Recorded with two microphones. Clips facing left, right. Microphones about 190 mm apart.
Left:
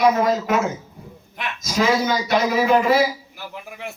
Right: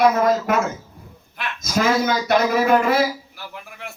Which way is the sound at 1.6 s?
50° right (ahead or behind).